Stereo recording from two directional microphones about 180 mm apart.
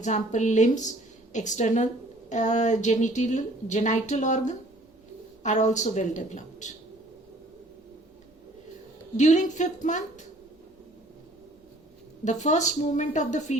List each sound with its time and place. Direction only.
0.0 s a woman's voice: 40° left (ahead or behind)
9.1 s a woman's voice: 40° left (ahead or behind)
12.2 s speech: 40° left (ahead or behind)